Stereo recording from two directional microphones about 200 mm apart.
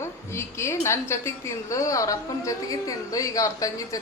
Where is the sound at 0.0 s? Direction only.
15° left (ahead or behind).